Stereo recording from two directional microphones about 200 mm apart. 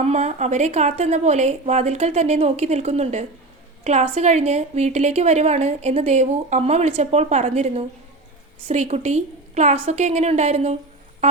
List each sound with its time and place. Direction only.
0.0 s a woman's voice: 35° right (ahead or behind)